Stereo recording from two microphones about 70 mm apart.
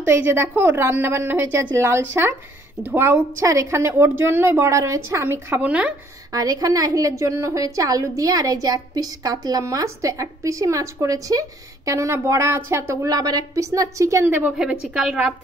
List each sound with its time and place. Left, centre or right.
0.0 s a woman's voice: right
3.4 s a woman's voice: right
4.6 s a woman's voice: right
5.6 s speech: centre
6.3 s a woman's voice: right
14.6 s a woman's voice: centre